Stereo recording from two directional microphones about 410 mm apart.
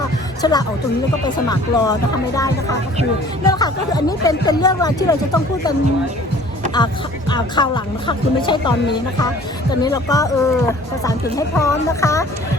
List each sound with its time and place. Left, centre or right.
0.4 s speech: centre
6.7 s speech: centre
9.8 s speech: centre